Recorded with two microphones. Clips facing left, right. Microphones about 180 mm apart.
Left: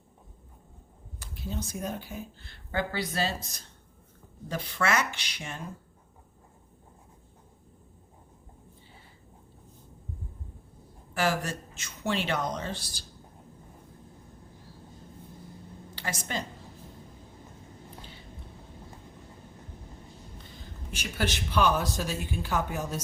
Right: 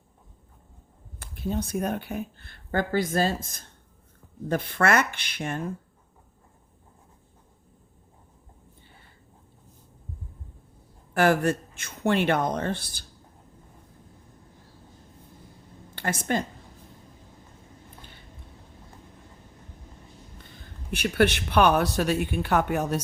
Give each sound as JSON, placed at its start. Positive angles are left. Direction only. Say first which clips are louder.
{"t": 1.2, "sound": "speech", "louder": "right 7 dB", "side_deg": -55}
{"t": 11.1, "sound": "speech", "louder": "right 7 dB", "side_deg": -55}
{"t": 16.0, "sound": "speech", "louder": "right 8 dB", "side_deg": -55}
{"t": 20.9, "sound": "speech", "louder": "right 10 dB", "side_deg": -60}